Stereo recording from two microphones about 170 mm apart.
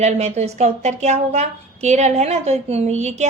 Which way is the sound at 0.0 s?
40° right (ahead or behind).